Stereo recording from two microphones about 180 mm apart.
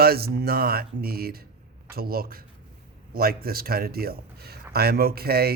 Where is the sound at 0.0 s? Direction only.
60° right (ahead or behind).